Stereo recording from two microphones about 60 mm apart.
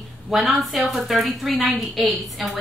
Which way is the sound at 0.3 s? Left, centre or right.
Centre.